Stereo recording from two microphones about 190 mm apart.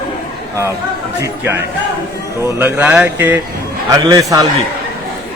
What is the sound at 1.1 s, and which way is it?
A man's voice, 15° right (ahead or behind).